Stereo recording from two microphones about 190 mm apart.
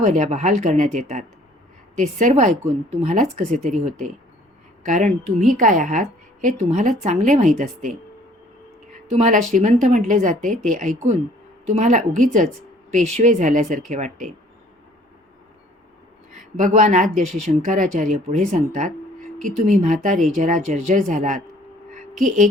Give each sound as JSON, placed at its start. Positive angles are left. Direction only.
{"t": 0.0, "sound": "a woman's voice", "side_deg": -40}
{"t": 9.0, "sound": "a woman's voice", "side_deg": -40}
{"t": 16.6, "sound": "a woman's voice", "side_deg": -40}